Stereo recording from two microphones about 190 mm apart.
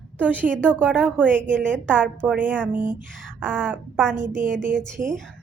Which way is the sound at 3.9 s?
Centre (ahead or behind).